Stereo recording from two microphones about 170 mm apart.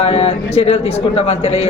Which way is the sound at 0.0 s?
35° left (ahead or behind).